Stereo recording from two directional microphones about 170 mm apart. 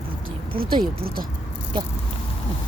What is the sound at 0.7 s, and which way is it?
Speech, 30° right (ahead or behind).